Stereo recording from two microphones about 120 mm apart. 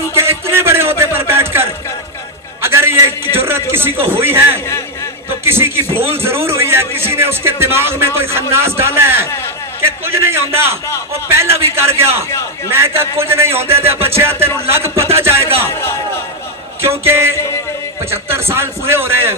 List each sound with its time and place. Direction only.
0.1 s a sound: 20° right (ahead or behind)
3.3 s a man's voice: 20° right (ahead or behind)
17.0 s a man's voice: 20° right (ahead or behind)